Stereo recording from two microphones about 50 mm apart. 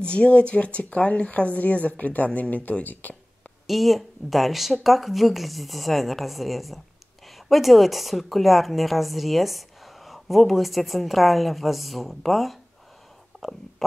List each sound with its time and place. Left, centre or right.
0.0 s speech: left
3.6 s a woman's voice: centre